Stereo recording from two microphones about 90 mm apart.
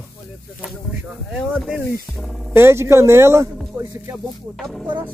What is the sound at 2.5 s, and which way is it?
Speech, 30° right (ahead or behind).